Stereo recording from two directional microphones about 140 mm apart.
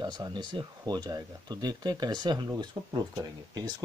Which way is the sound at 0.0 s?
30° right (ahead or behind).